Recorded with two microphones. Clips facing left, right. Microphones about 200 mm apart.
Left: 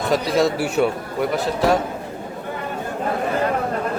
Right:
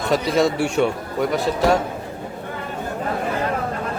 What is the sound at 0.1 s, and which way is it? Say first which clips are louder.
A man's voice: even; centre (ahead or behind).